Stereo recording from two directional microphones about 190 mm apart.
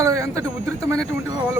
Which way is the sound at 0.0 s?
15° right (ahead or behind).